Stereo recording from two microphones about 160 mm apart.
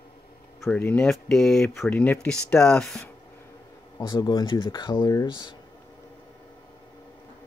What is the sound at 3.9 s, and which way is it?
Speech, 25° left (ahead or behind).